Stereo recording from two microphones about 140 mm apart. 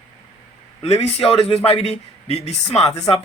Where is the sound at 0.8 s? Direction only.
50° left (ahead or behind).